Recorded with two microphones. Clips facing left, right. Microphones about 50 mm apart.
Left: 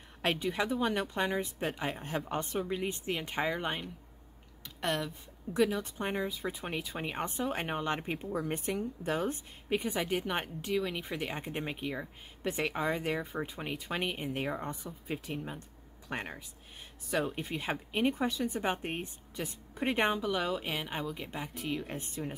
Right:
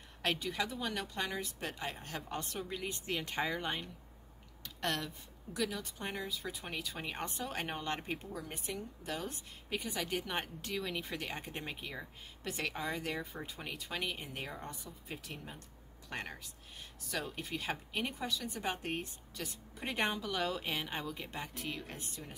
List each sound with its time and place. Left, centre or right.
0.2 s speech: left
4.6 s a sound: centre
5.5 s speech: left
8.3 s a woman's voice: left
10.1 s speech: centre
21.8 s speech: left